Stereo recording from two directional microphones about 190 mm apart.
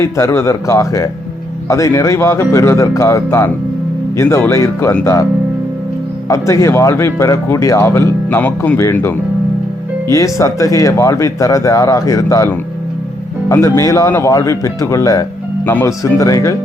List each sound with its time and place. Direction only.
0.0 s speech: 15° left (ahead or behind)
6.2 s speech: 15° left (ahead or behind)